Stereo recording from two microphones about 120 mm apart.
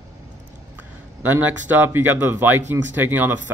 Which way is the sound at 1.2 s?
15° right (ahead or behind).